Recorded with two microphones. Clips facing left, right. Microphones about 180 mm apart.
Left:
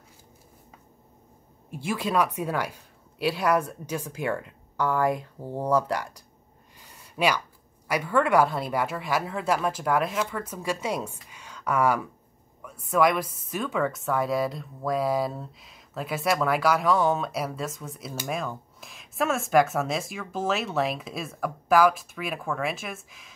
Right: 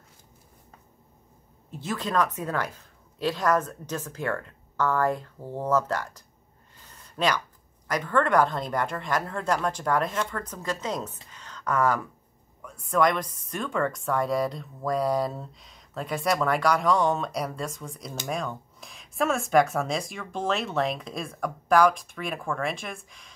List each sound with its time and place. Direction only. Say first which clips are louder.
1.7 s a woman's voice: left 2 dB; 10° left (ahead or behind)
6.8 s a sound: left 2 dB; 10° left (ahead or behind)
7.9 s a woman's voice: left 1 dB; 10° left (ahead or behind)